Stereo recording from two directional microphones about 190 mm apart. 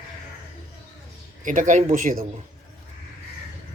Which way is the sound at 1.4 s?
40° right (ahead or behind).